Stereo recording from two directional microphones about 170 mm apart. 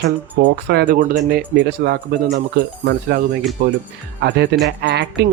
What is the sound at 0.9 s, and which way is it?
Speech, 55° right (ahead or behind).